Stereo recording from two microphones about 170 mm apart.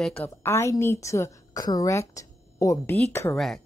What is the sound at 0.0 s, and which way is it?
Speech, 5° left (ahead or behind).